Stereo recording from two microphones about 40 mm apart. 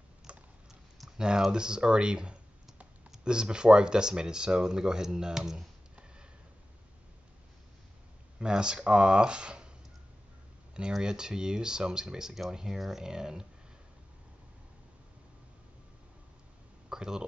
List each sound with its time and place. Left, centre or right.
0.3 s typing: right
1.1 s speech: centre
8.4 s speech: right
11.0 s speech: centre
16.9 s speech: centre